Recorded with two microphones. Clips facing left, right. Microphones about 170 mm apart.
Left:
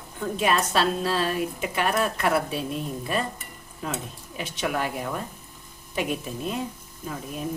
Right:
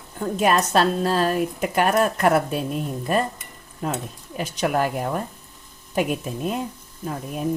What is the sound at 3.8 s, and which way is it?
A woman's voice, 45° right (ahead or behind).